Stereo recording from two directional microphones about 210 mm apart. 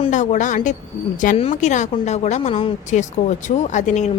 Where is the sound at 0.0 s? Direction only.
35° left (ahead or behind).